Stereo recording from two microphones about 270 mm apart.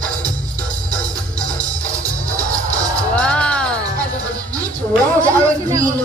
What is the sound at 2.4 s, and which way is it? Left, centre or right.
Music, centre.